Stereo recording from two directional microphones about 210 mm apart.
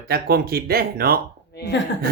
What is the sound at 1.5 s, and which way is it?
Speech, 50° left (ahead or behind).